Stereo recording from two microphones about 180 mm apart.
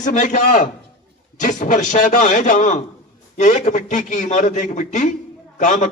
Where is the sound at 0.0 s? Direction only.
45° left (ahead or behind).